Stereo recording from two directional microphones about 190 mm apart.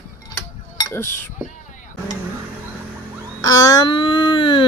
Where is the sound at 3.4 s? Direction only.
20° left (ahead or behind).